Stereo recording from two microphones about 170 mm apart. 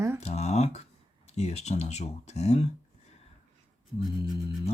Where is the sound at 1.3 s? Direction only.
40° left (ahead or behind).